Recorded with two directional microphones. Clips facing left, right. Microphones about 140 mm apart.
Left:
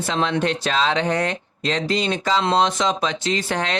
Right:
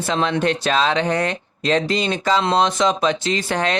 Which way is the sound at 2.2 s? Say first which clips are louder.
Right 2 dB; 50° right (ahead or behind).